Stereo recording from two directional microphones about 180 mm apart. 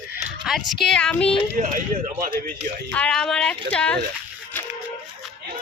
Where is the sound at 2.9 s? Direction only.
5° left (ahead or behind).